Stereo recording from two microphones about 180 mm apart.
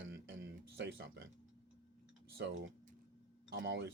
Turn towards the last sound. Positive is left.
turn(degrees=-85)